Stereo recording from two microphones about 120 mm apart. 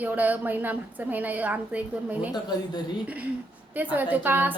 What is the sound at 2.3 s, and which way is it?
Speech, 35° left (ahead or behind).